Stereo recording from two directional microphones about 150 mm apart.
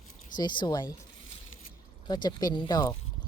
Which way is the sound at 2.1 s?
30° left (ahead or behind).